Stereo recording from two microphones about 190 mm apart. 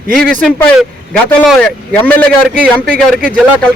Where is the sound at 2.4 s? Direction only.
5° right (ahead or behind).